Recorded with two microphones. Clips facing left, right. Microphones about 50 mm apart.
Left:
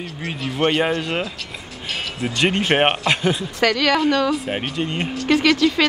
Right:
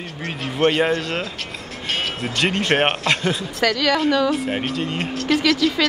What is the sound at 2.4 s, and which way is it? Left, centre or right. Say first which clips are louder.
A woman's voice: left 1 dB; centre.